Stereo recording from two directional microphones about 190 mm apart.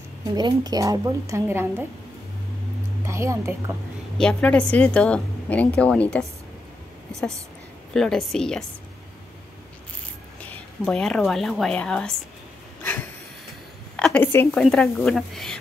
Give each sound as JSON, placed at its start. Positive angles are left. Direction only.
{"t": 0.4, "sound": "a woman's voice", "side_deg": -20}
{"t": 3.1, "sound": "a woman's voice", "side_deg": -15}
{"t": 4.2, "sound": "a woman's voice", "side_deg": 5}
{"t": 10.9, "sound": "speech", "side_deg": 5}
{"t": 12.8, "sound": "a sound", "side_deg": 10}
{"t": 13.9, "sound": "a woman's voice", "side_deg": 5}